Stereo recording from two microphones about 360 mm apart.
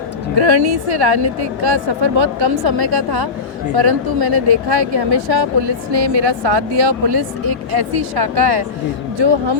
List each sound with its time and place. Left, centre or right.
0.3 s speech: right